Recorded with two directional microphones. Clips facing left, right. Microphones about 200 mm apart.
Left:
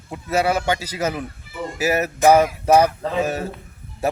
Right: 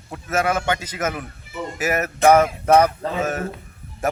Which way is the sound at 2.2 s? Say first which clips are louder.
Even; 10° left (ahead or behind).